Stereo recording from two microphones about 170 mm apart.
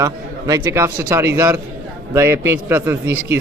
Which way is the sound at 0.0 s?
20° right (ahead or behind).